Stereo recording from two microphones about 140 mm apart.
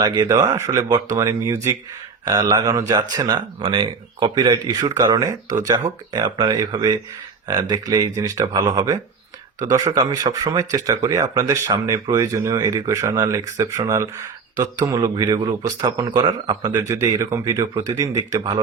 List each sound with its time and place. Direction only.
0.0 s speech: 30° right (ahead or behind)